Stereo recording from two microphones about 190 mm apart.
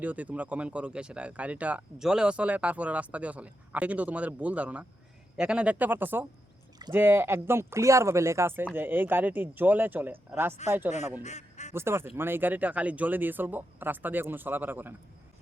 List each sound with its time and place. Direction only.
0.0 s speech: 10° right (ahead or behind)
11.2 s honk: 35° left (ahead or behind)
11.7 s speech: 15° right (ahead or behind)